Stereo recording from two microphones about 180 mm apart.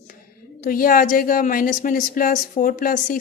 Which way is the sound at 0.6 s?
50° left (ahead or behind).